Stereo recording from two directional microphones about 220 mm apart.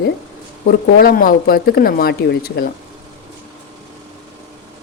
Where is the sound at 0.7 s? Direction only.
40° left (ahead or behind).